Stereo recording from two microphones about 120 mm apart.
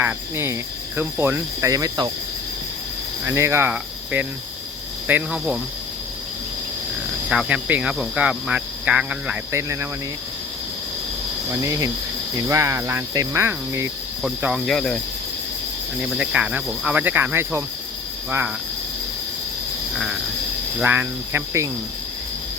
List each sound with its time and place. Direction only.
0.0 s cricket: 20° right (ahead or behind)
3.2 s cricket: 20° right (ahead or behind)
5.0 s speech: 10° right (ahead or behind)
7.3 s speech: 10° right (ahead or behind)
9.5 s cricket: 25° right (ahead or behind)
11.5 s speech: 30° right (ahead or behind)
12.4 s cricket: 25° right (ahead or behind)
14.2 s speech: 5° right (ahead or behind)
16.0 s speech: 10° right (ahead or behind)
20.8 s cricket: 20° right (ahead or behind)